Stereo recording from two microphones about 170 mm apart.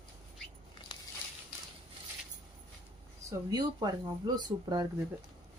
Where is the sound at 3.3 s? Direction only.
20° right (ahead or behind).